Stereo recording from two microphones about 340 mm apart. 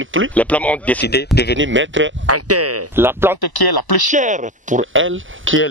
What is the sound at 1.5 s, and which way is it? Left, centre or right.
Speech, right.